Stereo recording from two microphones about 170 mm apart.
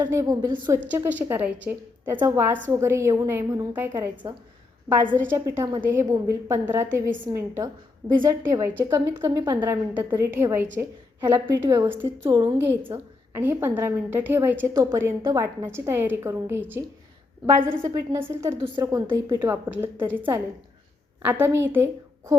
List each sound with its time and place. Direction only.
0.0 s a woman's voice: 20° right (ahead or behind)
0.9 s a woman's voice: 10° right (ahead or behind)
5.2 s a woman's voice: 15° right (ahead or behind)
12.3 s a woman's voice: 25° right (ahead or behind)
12.5 s a woman's voice: 15° right (ahead or behind)